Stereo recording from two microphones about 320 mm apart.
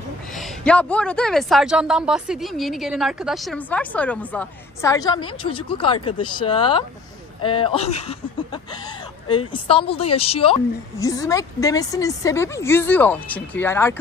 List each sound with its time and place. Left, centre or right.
0.4 s a woman's voice: centre
9.5 s a woman's voice: centre